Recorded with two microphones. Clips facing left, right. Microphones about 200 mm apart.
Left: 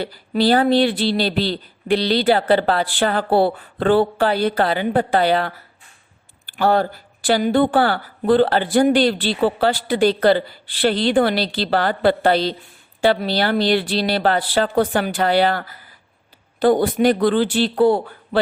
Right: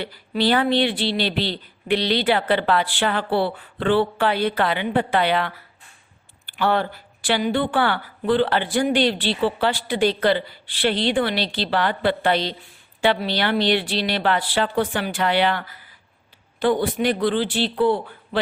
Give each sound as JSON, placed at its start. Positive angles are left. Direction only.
{"t": 0.0, "sound": "speech", "side_deg": 40}
{"t": 6.6, "sound": "speech", "side_deg": 40}